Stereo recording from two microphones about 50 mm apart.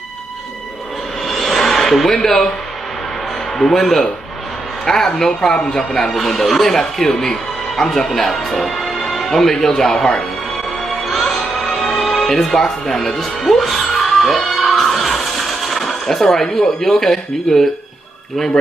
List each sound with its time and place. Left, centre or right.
1.2 s a sound: centre
3.5 s speech: centre
10.9 s music: centre